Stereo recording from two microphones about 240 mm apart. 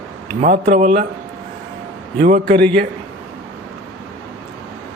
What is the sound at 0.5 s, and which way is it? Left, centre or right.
Speech, right.